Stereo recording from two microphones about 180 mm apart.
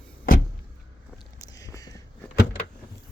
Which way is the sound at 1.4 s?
20° left (ahead or behind).